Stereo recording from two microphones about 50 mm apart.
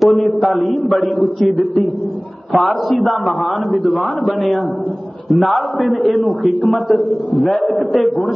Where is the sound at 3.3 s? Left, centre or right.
Centre.